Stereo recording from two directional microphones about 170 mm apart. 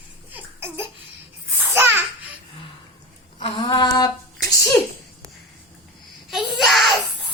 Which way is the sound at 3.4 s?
30° left (ahead or behind).